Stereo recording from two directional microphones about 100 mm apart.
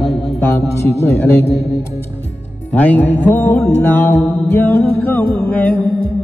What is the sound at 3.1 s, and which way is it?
Music, 20° left (ahead or behind).